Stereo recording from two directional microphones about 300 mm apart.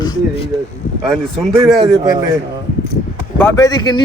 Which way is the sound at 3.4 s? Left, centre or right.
Centre.